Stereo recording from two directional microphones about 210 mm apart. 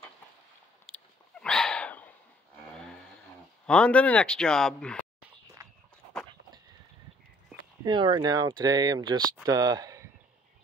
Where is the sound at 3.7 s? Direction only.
5° left (ahead or behind).